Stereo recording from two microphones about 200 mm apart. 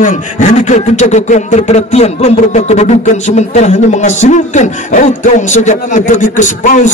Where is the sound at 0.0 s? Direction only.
40° left (ahead or behind).